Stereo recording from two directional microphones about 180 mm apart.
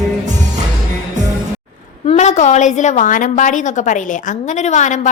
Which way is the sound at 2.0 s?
40° left (ahead or behind).